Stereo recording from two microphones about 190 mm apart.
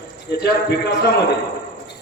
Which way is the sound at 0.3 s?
60° left (ahead or behind).